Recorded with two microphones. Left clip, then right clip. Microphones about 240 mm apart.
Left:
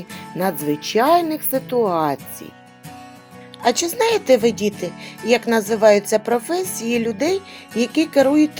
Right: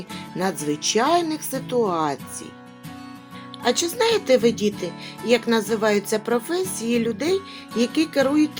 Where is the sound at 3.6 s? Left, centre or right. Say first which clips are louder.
Left 3 dB; left.